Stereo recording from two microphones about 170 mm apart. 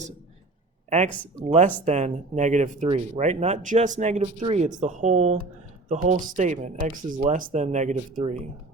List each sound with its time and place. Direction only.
0.9 s speech: 40° right (ahead or behind)